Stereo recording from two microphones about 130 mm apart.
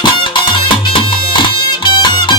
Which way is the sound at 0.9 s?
40° left (ahead or behind).